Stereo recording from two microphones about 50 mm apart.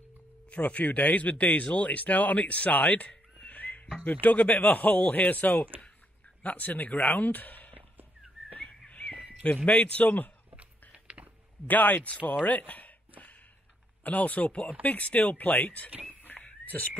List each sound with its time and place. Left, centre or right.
0.5 s speech: left
3.4 s music: left
4.0 s speech: left
8.5 s a sound: centre
9.7 s speech: left
10.5 s chewing: right
11.6 s speech: left
16.2 s dog: left
16.6 s speech: left